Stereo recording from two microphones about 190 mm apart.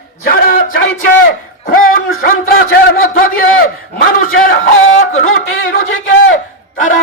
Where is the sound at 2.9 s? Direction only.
90° left.